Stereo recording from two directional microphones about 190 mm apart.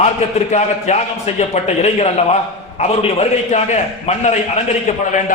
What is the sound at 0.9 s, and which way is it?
A man's voice, 35° left (ahead or behind).